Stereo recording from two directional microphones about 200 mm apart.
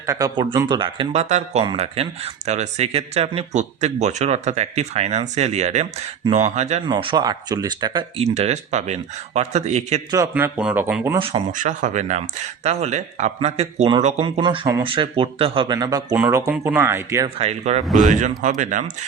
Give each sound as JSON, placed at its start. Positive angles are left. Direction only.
{"t": 0.0, "sound": "speech", "side_deg": -15}
{"t": 6.9, "sound": "speech", "side_deg": -20}
{"t": 8.4, "sound": "speech", "side_deg": -35}
{"t": 10.1, "sound": "speech", "side_deg": -15}
{"t": 11.2, "sound": "speech", "side_deg": -30}
{"t": 17.2, "sound": "speech", "side_deg": -30}